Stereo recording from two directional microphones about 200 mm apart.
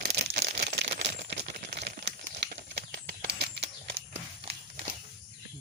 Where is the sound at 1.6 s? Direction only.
55° right (ahead or behind).